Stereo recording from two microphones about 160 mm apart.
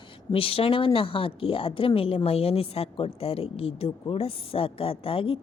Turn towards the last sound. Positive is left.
turn(degrees=35)  # may be behind; listen again after turning